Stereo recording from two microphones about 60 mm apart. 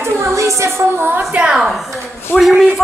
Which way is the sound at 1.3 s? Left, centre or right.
Centre.